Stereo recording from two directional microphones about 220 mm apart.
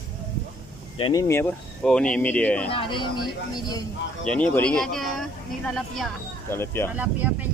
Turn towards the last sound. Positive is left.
turn(degrees=-5)  # may be behind; listen again after turning